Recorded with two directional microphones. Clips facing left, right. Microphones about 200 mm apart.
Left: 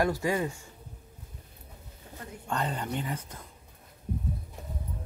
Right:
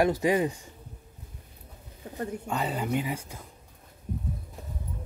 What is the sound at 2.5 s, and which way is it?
Speech, 5° right (ahead or behind).